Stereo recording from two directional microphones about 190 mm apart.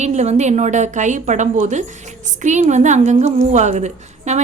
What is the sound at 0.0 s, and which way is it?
A woman's voice, 35° right (ahead or behind).